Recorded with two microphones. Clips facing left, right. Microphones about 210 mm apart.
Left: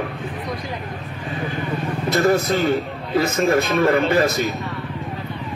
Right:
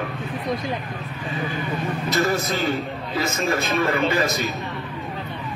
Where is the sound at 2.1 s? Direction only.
55° left (ahead or behind).